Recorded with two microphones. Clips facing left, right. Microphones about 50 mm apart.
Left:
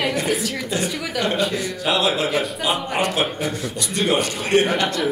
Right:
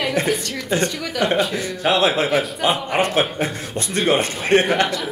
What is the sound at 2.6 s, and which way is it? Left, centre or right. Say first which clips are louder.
Speech: right 3 dB; centre.